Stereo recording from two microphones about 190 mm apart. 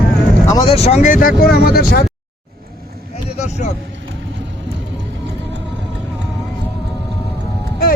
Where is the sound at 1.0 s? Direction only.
45° left (ahead or behind).